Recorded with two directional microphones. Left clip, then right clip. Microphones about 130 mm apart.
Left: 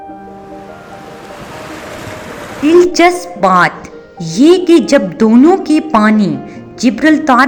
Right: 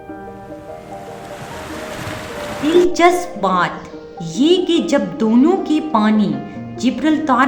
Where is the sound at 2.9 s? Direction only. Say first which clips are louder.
Left 3 dB; 50° left (ahead or behind).